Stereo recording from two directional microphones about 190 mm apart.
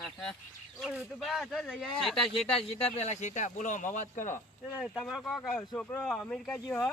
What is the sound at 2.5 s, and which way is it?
Speech, 30° left (ahead or behind).